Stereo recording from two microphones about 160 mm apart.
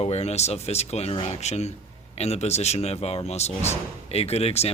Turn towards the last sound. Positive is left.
turn(degrees=40)  # may be behind; listen again after turning